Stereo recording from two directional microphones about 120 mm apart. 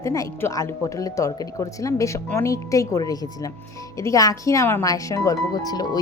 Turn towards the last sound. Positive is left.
turn(degrees=35)  # may be behind; listen again after turning